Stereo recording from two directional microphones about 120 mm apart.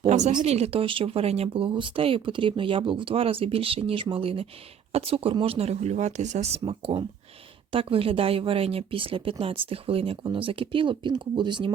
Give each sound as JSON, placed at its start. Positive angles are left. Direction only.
{"t": 0.1, "sound": "speech", "side_deg": -90}
{"t": 0.4, "sound": "speech", "side_deg": -60}